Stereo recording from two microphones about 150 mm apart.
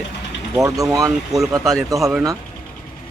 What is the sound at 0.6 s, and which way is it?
Speech, 20° right (ahead or behind).